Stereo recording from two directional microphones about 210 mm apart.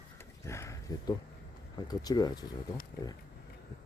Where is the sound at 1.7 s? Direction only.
20° left (ahead or behind).